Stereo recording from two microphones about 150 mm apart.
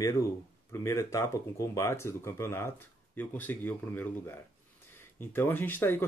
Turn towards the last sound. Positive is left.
turn(degrees=15)  # may be behind; listen again after turning